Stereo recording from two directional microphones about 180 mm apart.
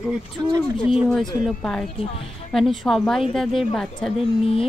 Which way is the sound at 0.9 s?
Centre (ahead or behind).